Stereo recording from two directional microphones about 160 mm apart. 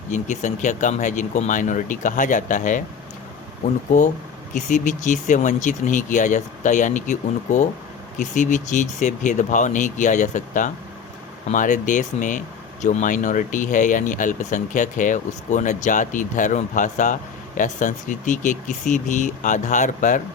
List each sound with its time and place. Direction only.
0.1 s speech: 50° left (ahead or behind)